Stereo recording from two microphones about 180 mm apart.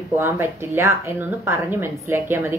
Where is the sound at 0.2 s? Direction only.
15° right (ahead or behind).